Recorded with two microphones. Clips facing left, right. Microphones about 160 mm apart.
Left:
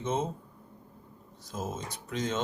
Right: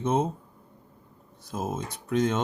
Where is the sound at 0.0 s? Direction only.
55° right (ahead or behind).